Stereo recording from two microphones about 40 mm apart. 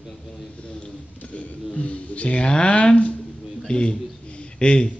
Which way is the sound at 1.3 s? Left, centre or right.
Left.